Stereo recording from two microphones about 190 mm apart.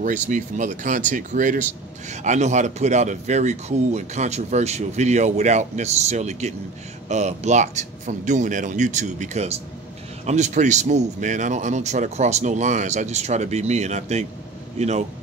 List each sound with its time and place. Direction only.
0.0 s speech: 40° right (ahead or behind)